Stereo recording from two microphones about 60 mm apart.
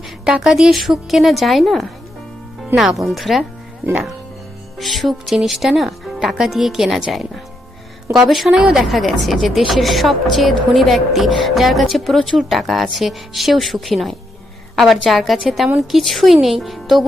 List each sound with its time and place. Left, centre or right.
0.3 s speech: centre
3.8 s speech: right
4.8 s speech: centre
15.4 s speech: centre